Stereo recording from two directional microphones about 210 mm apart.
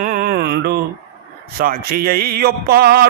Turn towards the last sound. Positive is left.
turn(degrees=-45)  # may be behind; listen again after turning